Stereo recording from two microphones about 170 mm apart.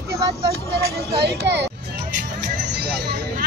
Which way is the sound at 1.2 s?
80° right.